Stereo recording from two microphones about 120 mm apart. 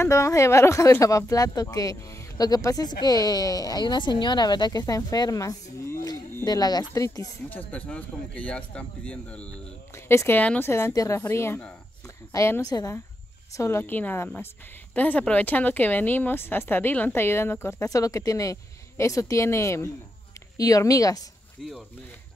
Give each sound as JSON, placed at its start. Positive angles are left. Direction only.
{"t": 0.0, "sound": "speech", "side_deg": 25}
{"t": 7.4, "sound": "speech", "side_deg": 15}
{"t": 10.0, "sound": "speech", "side_deg": 20}
{"t": 10.7, "sound": "speech", "side_deg": 25}